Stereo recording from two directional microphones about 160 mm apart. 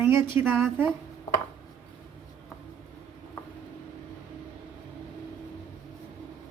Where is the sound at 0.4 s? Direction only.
10° right (ahead or behind).